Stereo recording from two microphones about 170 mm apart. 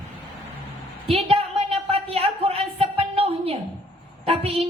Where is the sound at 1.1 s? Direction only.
35° right (ahead or behind).